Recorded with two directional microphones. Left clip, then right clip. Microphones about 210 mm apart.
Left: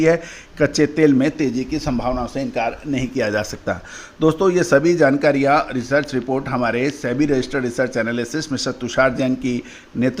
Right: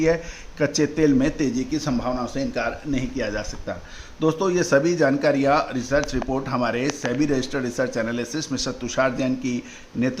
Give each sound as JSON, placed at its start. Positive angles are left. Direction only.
{"t": 0.6, "sound": "speech", "side_deg": 20}
{"t": 3.0, "sound": "speech", "side_deg": 35}
{"t": 4.2, "sound": "speech", "side_deg": 20}